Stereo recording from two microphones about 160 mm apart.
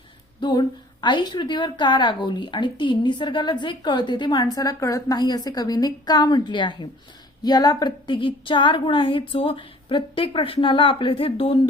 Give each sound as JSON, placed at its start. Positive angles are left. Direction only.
{"t": 0.3, "sound": "a woman's voice", "side_deg": 25}